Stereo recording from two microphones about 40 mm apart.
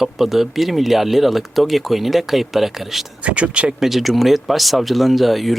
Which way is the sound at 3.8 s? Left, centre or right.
Centre.